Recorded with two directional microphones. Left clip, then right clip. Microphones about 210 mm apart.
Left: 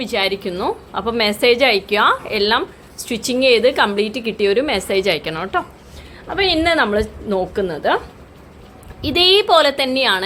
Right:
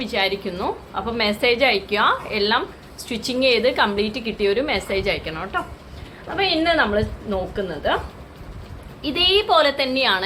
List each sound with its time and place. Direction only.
0.0 s a woman's voice: 40° left (ahead or behind)
9.0 s a woman's voice: 50° left (ahead or behind)